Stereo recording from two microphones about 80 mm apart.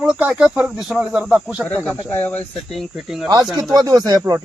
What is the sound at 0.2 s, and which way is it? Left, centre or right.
Speech, right.